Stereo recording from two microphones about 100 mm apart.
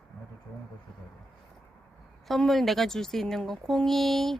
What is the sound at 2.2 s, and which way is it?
Speech, centre (ahead or behind).